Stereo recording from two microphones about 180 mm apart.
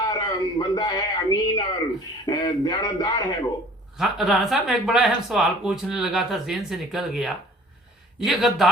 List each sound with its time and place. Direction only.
0.0 s a man's voice: 25° left (ahead or behind)
3.9 s speech: centre (ahead or behind)